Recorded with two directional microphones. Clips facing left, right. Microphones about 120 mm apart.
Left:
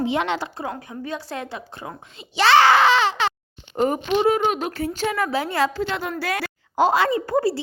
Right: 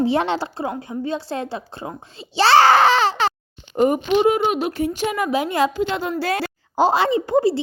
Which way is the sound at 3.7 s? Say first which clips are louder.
Right 4 dB; 10° right (ahead or behind).